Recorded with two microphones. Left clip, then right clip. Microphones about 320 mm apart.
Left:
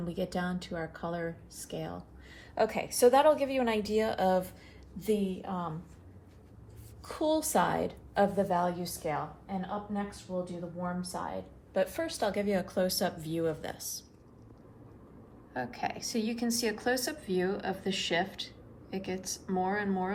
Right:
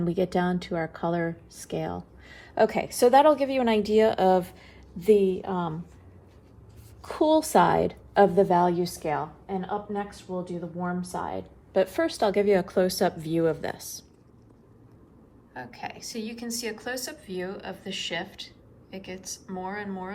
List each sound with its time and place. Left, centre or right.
0.0 s a woman's voice: right
7.0 s a woman's voice: right
10.8 s a woman's voice: right
15.5 s a woman's voice: centre